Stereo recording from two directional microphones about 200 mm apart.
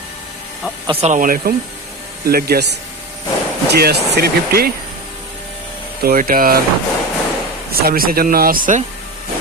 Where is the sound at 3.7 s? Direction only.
55° right (ahead or behind).